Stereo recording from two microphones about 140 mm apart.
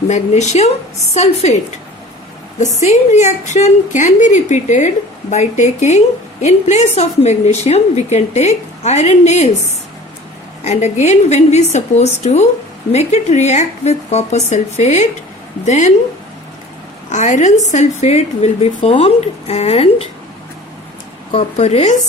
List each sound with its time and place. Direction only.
0.1 s a woman's voice: 55° left (ahead or behind)
2.6 s a woman's voice: 55° left (ahead or behind)
10.6 s a woman's voice: 50° left (ahead or behind)
17.1 s a woman's voice: 60° left (ahead or behind)
21.3 s a woman's voice: 55° left (ahead or behind)